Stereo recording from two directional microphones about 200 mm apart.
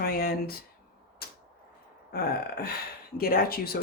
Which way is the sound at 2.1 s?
50° left (ahead or behind).